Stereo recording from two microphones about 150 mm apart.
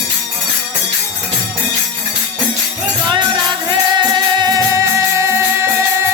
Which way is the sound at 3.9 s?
30° right (ahead or behind).